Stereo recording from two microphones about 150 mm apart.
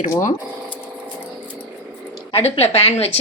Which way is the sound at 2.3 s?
45° left (ahead or behind).